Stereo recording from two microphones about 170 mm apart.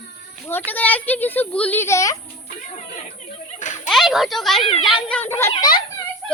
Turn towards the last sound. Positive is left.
turn(degrees=25)  # may be behind; listen again after turning